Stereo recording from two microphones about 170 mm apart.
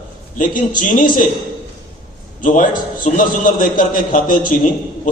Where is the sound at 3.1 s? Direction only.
55° left (ahead or behind).